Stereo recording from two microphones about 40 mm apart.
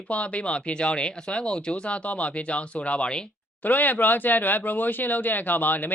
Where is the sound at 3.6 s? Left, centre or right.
Left.